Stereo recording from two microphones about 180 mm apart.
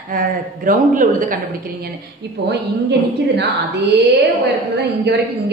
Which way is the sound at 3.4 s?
65° right (ahead or behind).